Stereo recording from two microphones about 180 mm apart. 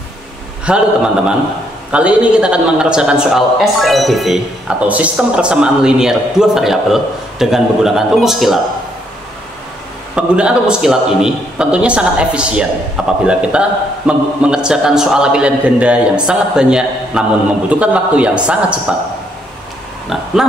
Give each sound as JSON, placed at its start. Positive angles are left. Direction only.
{"t": 0.7, "sound": "a man's voice", "side_deg": -5}
{"t": 1.9, "sound": "a man's voice", "side_deg": -5}
{"t": 10.1, "sound": "a man's voice", "side_deg": -5}